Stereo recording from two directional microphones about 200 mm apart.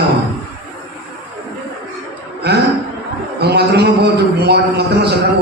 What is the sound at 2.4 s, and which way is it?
Chuckle, 55° right (ahead or behind).